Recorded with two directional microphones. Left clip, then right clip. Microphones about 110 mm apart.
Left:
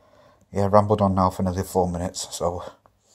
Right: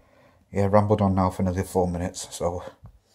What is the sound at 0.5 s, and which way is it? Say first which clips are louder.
Speech: left 2 dB; centre (ahead or behind).